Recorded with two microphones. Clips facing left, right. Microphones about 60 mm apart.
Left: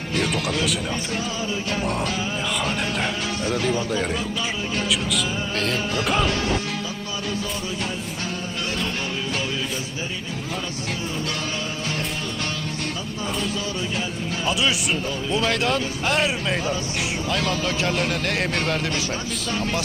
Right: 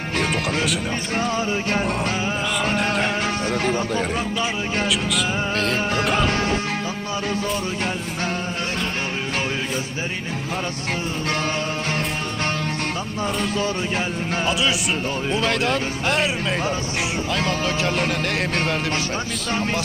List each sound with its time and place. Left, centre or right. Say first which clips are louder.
1.1 s speech: right 4 dB; right
4.9 s music: right 2 dB; centre
6.2 s music: right 2 dB; right
13.2 s speech: right 4 dB; right
14.4 s speech: even; centre
16.6 s speech: right 2 dB; right
17.6 s speech: right 1 dB; centre